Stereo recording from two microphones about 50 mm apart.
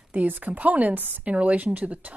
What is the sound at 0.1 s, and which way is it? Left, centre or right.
A woman's voice, right.